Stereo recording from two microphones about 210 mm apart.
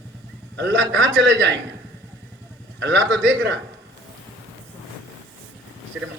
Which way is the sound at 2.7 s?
60° right (ahead or behind).